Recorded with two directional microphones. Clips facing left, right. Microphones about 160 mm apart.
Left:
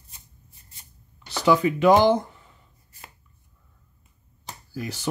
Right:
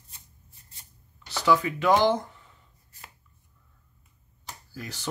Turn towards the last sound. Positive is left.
turn(degrees=10)  # may be behind; listen again after turning